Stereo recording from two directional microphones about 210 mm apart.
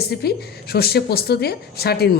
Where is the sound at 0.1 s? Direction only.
50° left (ahead or behind).